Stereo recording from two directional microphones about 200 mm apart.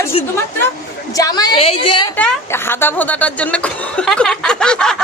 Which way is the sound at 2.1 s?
10° left (ahead or behind).